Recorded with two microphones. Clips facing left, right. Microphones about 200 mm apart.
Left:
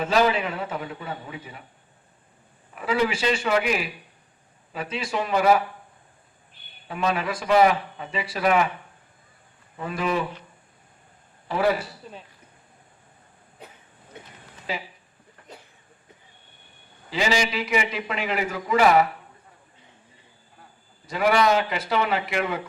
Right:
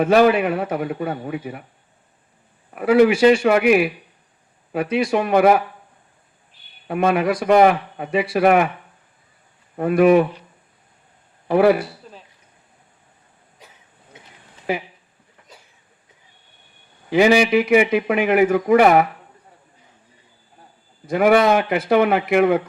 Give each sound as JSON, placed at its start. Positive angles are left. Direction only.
{"t": 0.0, "sound": "a man's voice", "side_deg": -55}
{"t": 2.6, "sound": "a man's voice", "side_deg": -55}
{"t": 6.8, "sound": "a man's voice", "side_deg": -55}
{"t": 9.7, "sound": "a man's voice", "side_deg": -55}
{"t": 11.4, "sound": "a man's voice", "side_deg": -60}
{"t": 14.7, "sound": "a man's voice", "side_deg": -55}
{"t": 17.1, "sound": "a man's voice", "side_deg": -60}
{"t": 21.1, "sound": "a man's voice", "side_deg": -55}